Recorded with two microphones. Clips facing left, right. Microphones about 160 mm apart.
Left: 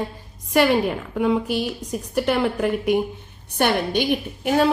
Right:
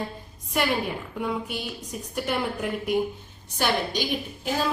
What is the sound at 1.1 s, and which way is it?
A woman's voice, 90° left.